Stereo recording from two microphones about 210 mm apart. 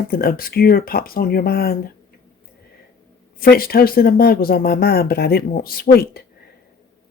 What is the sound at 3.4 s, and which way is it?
Speech, 45° left (ahead or behind).